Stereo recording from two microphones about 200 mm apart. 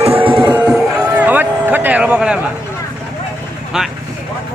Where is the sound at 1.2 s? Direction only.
10° right (ahead or behind).